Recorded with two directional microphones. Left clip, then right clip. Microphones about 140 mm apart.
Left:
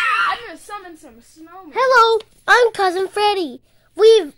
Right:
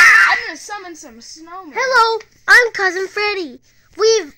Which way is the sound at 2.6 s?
85° left.